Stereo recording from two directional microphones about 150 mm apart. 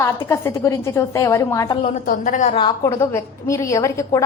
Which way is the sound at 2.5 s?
30° left (ahead or behind).